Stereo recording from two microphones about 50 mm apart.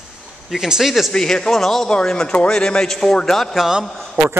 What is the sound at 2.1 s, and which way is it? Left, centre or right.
A man's voice, centre.